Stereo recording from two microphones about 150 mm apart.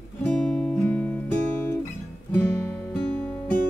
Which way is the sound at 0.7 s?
15° left (ahead or behind).